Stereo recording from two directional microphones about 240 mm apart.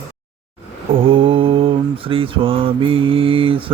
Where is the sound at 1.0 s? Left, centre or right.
Right.